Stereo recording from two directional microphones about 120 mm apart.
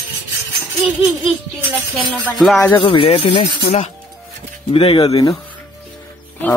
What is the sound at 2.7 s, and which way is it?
Speech, 45° left (ahead or behind).